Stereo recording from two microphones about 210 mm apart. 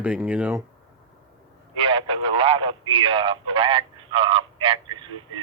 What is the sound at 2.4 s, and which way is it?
Speech, 25° right (ahead or behind).